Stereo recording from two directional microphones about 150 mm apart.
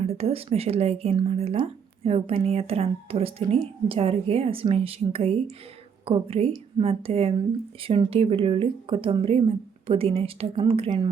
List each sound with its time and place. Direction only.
0.0 s speech: 40° right (ahead or behind)